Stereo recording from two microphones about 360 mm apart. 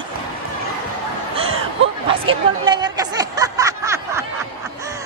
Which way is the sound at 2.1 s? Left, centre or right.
Centre.